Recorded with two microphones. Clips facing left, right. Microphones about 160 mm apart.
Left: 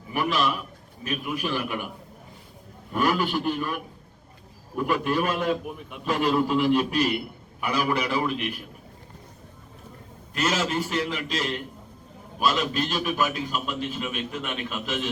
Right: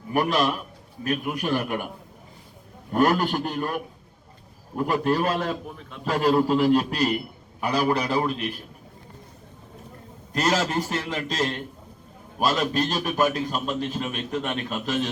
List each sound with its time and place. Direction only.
0.1 s a man's voice: 45° right (ahead or behind)
2.9 s a man's voice: 45° right (ahead or behind)
4.8 s a man's voice: 35° right (ahead or behind)
5.6 s a man's voice: 10° left (ahead or behind)
6.1 s a man's voice: 35° right (ahead or behind)
10.3 s a man's voice: 40° right (ahead or behind)